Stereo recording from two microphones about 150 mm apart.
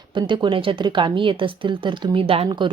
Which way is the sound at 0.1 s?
30° right (ahead or behind).